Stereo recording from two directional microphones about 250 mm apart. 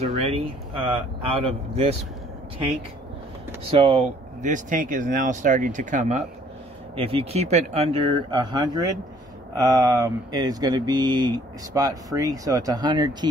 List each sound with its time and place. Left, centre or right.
0.0 s speech: right
3.7 s speech: right